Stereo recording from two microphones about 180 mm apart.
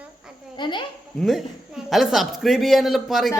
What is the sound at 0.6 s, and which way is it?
Speech, 25° left (ahead or behind).